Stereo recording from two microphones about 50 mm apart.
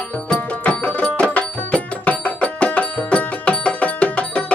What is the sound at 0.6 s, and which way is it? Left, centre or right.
Music, left.